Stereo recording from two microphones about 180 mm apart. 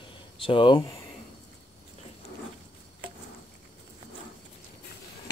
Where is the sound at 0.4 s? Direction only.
30° left (ahead or behind).